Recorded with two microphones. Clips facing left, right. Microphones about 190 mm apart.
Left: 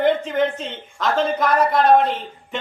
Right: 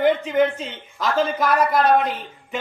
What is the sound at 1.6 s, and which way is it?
Speech, 30° left (ahead or behind).